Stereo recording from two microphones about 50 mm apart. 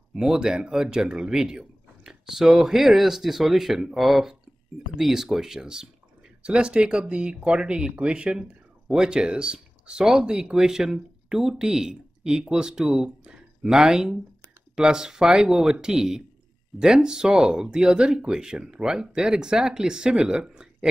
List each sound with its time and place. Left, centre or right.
0.1 s speech: centre